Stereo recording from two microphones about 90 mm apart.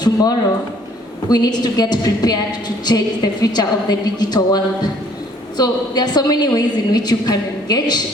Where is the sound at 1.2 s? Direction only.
50° left (ahead or behind).